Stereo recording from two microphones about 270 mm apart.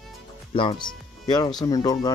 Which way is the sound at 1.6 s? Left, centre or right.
Centre.